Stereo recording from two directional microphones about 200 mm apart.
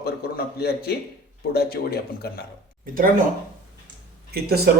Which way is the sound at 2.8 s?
45° right (ahead or behind).